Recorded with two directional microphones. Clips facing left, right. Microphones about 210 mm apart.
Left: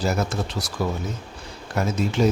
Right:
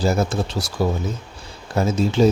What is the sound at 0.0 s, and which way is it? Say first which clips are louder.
Speech: right 4 dB; 30° right (ahead or behind).